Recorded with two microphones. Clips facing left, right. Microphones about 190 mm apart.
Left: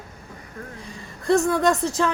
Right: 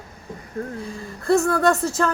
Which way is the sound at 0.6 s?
45° right (ahead or behind).